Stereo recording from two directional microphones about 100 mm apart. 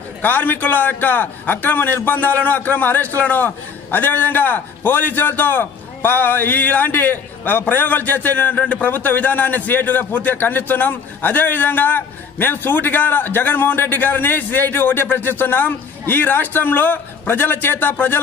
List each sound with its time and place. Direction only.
0.2 s a man's voice: 20° left (ahead or behind)